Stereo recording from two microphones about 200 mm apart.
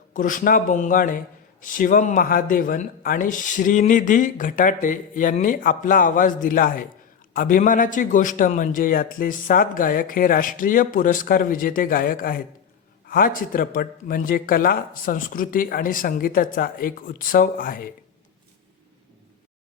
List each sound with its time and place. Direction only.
0.1 s a man's voice: 40° left (ahead or behind)